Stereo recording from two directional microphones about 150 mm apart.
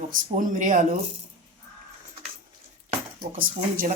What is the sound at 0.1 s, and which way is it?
Speech, 60° right (ahead or behind).